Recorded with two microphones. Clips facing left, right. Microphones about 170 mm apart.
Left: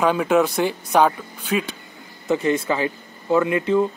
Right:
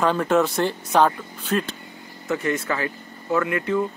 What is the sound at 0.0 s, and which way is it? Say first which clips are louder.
Speech: left 2 dB; 5° left (ahead or behind).